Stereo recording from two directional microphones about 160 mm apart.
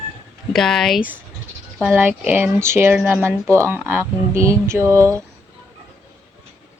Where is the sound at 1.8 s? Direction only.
10° right (ahead or behind).